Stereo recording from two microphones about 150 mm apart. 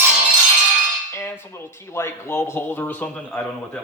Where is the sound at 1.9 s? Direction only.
15° left (ahead or behind).